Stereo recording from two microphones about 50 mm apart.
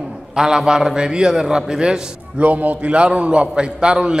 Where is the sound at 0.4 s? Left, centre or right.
Centre.